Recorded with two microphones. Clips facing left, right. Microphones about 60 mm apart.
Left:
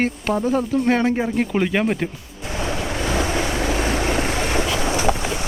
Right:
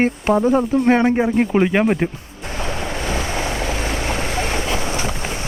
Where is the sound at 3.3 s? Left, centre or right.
Right.